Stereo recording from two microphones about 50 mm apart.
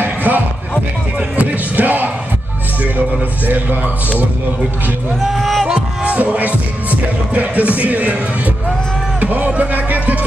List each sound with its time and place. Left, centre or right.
0.0 s music: right
1.4 s music: right
5.2 s music: centre
5.7 s music: right
9.2 s music: right